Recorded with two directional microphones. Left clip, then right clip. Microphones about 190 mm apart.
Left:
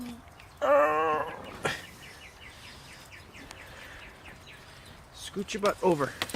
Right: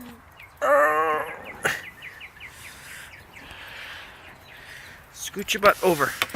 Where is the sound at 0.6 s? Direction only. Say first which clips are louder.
Right 4 dB; centre (ahead or behind).